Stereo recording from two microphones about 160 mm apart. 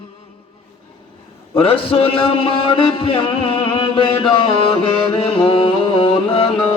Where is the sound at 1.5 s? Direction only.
35° left (ahead or behind).